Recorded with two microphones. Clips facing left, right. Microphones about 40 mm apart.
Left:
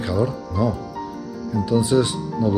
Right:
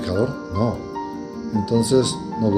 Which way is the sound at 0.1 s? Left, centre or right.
Centre.